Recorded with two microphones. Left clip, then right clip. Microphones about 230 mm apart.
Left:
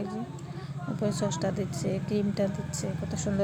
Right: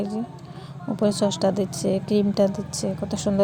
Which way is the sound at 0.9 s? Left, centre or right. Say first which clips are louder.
Right 9 dB; right.